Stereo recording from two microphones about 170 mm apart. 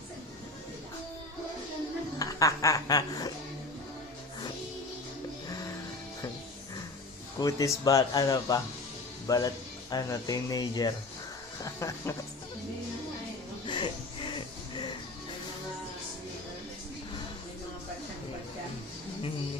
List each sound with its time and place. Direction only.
2.1 s speech: 20° left (ahead or behind)
7.3 s a man's voice: 20° left (ahead or behind)
13.7 s music: 30° left (ahead or behind)